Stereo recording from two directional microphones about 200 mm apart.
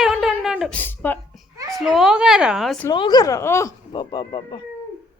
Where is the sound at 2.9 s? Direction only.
20° left (ahead or behind).